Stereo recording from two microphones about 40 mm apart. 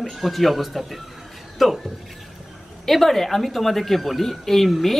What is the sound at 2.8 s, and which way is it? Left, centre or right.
Speech, centre.